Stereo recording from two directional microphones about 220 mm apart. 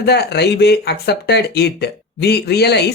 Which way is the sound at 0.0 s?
50° left (ahead or behind).